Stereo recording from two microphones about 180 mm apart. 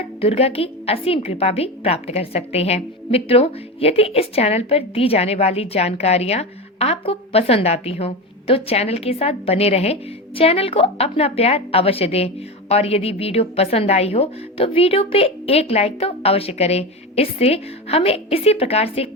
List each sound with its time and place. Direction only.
0.2 s a woman's voice: 35° left (ahead or behind)